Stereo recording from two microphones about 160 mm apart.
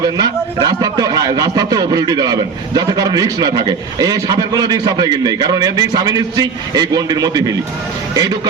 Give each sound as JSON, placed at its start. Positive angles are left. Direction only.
{"t": 0.0, "sound": "a man's voice", "side_deg": -25}